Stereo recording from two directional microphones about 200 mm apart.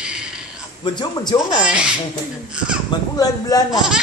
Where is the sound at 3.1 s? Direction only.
20° left (ahead or behind).